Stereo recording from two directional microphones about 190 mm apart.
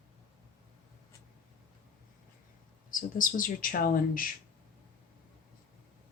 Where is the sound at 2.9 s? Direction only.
45° left (ahead or behind).